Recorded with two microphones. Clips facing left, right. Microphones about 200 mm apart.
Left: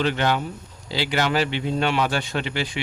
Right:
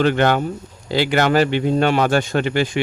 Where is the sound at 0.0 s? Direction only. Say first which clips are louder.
Right 6 dB; 50° right (ahead or behind).